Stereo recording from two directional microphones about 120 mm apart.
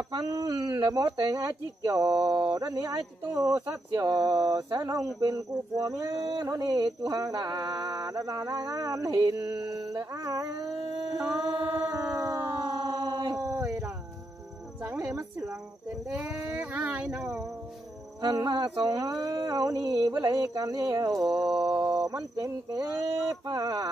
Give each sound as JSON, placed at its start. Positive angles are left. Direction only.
{"t": 0.1, "sound": "speech", "side_deg": -35}
{"t": 3.3, "sound": "speech", "side_deg": -20}
{"t": 6.2, "sound": "speech", "side_deg": -40}
{"t": 9.1, "sound": "speech", "side_deg": -40}
{"t": 11.1, "sound": "speech", "side_deg": -10}
{"t": 11.7, "sound": "howl", "side_deg": -30}
{"t": 12.5, "sound": "a sound", "side_deg": -35}
{"t": 13.4, "sound": "dog", "side_deg": -25}
{"t": 14.9, "sound": "speech", "side_deg": -25}
{"t": 16.2, "sound": "speech", "side_deg": -5}
{"t": 18.2, "sound": "speech", "side_deg": -35}
{"t": 21.3, "sound": "a sound", "side_deg": -5}
{"t": 21.9, "sound": "speech", "side_deg": -30}